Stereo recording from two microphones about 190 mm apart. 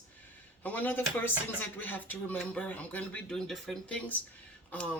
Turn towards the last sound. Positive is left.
turn(degrees=10)  # may be behind; listen again after turning